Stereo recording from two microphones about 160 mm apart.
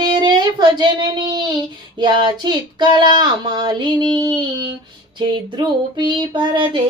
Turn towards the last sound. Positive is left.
turn(degrees=-30)  # may be behind; listen again after turning